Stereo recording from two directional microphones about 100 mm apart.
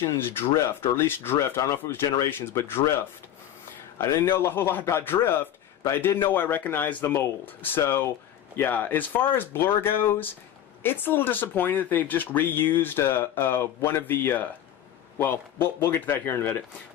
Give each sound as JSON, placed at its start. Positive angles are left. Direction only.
{"t": 0.3, "sound": "speech", "side_deg": 25}
{"t": 3.9, "sound": "speech", "side_deg": 25}